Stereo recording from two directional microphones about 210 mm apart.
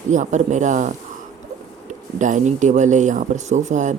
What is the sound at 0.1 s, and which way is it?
Speech, 35° right (ahead or behind).